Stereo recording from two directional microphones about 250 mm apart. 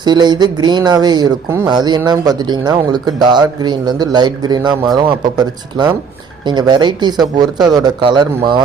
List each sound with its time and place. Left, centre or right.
0.0 s speech: centre